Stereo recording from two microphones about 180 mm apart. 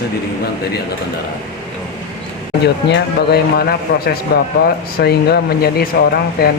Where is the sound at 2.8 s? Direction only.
70° left (ahead or behind).